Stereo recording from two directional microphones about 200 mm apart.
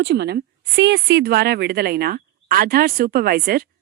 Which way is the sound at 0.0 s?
60° right (ahead or behind).